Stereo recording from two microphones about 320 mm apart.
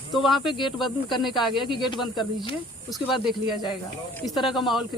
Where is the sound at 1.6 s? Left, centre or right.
Centre.